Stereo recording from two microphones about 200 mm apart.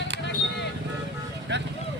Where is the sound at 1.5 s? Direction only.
60° right (ahead or behind).